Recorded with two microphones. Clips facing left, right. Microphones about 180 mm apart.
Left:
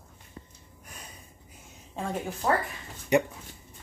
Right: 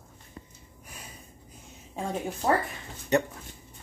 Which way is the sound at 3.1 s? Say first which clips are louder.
Left 1 dB; 10° left (ahead or behind).